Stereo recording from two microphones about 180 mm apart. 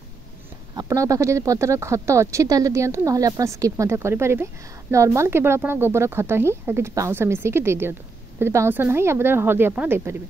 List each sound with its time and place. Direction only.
0.7 s speech: 20° right (ahead or behind)